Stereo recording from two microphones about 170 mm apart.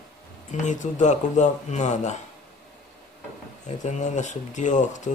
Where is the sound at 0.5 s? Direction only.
45° left (ahead or behind).